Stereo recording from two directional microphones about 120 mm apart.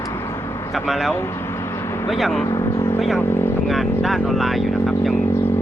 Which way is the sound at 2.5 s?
35° left (ahead or behind).